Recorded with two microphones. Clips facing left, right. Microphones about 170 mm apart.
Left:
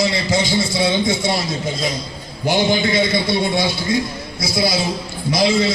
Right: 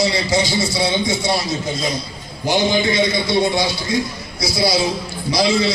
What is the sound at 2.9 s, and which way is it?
A man's voice, 55° left (ahead or behind).